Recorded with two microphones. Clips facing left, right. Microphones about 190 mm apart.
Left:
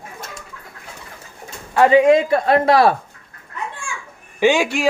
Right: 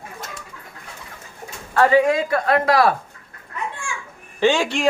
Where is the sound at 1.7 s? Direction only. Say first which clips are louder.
Left 4 dB; 20° left (ahead or behind).